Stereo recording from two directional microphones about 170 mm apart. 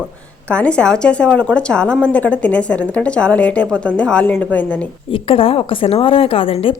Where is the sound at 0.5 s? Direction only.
5° left (ahead or behind).